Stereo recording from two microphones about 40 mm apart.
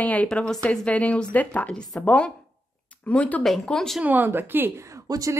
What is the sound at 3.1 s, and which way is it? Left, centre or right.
Speech, left.